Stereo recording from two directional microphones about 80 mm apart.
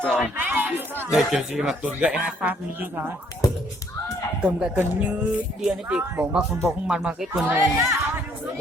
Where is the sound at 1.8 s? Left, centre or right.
Centre.